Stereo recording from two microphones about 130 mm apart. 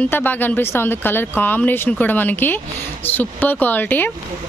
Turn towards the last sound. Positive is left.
turn(degrees=15)  # may be behind; listen again after turning